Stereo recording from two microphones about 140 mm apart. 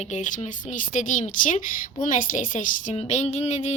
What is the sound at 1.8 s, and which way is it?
Speech, 70° left (ahead or behind).